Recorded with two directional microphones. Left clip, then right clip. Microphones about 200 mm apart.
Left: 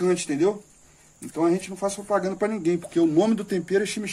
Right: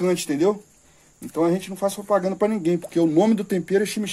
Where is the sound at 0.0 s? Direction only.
35° right (ahead or behind).